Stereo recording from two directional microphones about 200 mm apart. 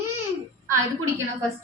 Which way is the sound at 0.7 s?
15° right (ahead or behind).